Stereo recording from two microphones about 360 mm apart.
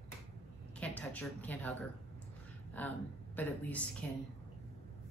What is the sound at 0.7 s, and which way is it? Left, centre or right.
Speech, centre.